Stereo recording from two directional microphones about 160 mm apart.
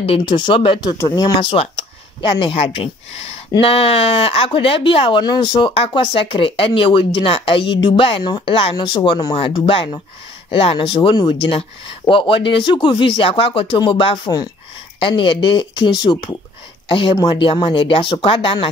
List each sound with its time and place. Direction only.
0.0 s speech: 35° left (ahead or behind)